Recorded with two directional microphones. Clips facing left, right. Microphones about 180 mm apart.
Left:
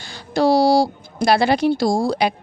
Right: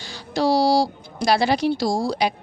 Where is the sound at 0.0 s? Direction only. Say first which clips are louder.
Left 4 dB; 55° left (ahead or behind).